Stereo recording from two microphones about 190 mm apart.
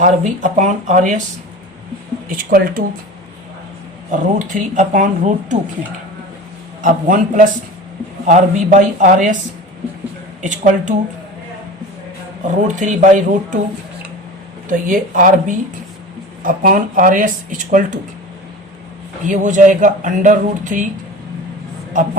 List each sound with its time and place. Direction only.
0.0 s speech: 40° right (ahead or behind)
2.3 s speech: 50° right (ahead or behind)
4.4 s speech: 45° right (ahead or behind)
6.8 s speech: 45° right (ahead or behind)
10.4 s speech: 40° right (ahead or behind)
12.6 s speech: 40° right (ahead or behind)
14.7 s speech: 45° right (ahead or behind)
19.2 s speech: 40° right (ahead or behind)